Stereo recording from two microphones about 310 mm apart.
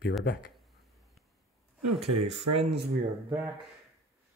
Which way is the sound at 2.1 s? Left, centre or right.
Right.